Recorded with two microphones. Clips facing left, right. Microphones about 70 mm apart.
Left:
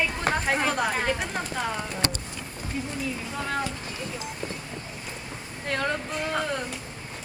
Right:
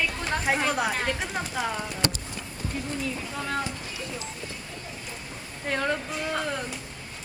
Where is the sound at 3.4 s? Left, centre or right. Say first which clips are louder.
Left 1 dB; centre.